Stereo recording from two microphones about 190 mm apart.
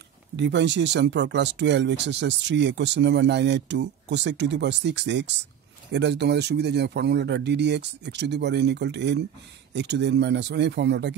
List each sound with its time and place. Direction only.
0.4 s speech: 65° right (ahead or behind)